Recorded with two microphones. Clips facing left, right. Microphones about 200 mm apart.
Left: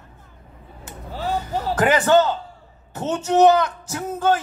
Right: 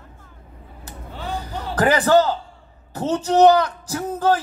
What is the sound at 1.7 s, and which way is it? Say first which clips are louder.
A woman's voice: right 1 dB; 35° right (ahead or behind).